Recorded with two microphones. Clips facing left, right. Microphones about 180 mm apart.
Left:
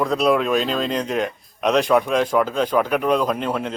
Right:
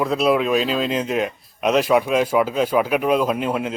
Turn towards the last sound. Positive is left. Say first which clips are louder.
# right 1 dB
turn(degrees=-5)  # may be behind; listen again after turning